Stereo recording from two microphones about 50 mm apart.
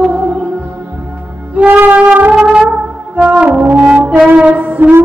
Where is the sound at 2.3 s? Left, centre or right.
Centre.